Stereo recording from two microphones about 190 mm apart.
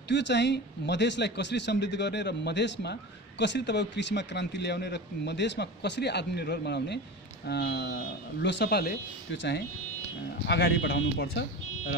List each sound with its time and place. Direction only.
0.1 s speech: 65° left (ahead or behind)